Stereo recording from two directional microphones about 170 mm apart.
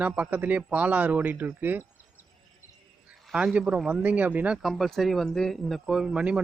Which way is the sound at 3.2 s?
5° right (ahead or behind).